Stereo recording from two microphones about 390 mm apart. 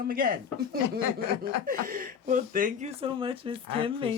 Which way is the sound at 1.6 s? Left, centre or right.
Right.